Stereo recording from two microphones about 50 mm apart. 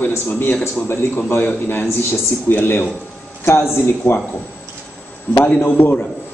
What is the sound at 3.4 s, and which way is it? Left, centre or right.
Speech, left.